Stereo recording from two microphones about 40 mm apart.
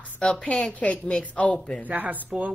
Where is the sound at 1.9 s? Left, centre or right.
Right.